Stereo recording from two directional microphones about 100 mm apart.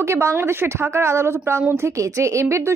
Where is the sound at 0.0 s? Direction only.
25° right (ahead or behind).